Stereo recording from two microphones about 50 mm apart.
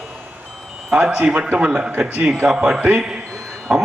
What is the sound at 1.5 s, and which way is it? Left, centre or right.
A man's voice, centre.